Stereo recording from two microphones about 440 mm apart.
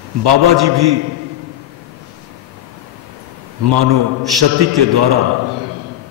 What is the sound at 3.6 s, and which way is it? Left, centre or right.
A man's voice, right.